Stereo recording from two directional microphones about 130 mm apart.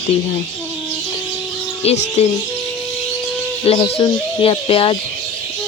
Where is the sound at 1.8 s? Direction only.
55° left (ahead or behind).